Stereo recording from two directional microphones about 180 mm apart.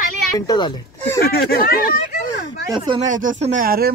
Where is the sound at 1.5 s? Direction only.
55° left (ahead or behind).